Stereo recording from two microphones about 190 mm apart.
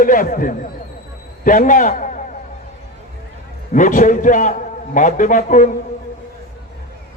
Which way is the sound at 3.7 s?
40° left (ahead or behind).